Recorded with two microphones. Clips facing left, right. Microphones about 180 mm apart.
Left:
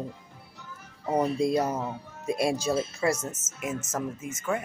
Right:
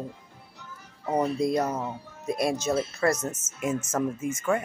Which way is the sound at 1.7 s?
10° left (ahead or behind).